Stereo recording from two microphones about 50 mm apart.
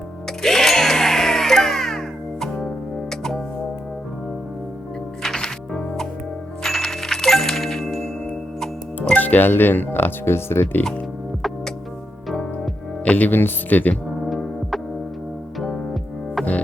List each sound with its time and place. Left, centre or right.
0.4 s music: centre
5.2 s music: centre
9.1 s speech: left
13.1 s speech: left
14.3 s music: centre
16.4 s music: left